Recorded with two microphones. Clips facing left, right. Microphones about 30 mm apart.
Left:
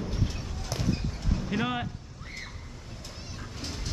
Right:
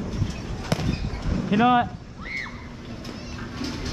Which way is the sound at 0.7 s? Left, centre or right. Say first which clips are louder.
Right 8 dB; right.